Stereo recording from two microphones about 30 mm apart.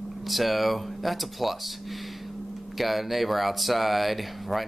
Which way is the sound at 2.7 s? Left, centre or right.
Centre.